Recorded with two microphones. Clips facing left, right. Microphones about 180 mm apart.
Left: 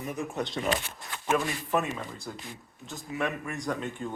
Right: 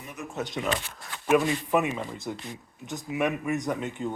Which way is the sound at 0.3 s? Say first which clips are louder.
Right 2 dB; 10° right (ahead or behind).